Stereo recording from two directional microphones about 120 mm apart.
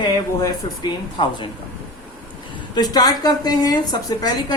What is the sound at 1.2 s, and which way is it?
Speech, 40° left (ahead or behind).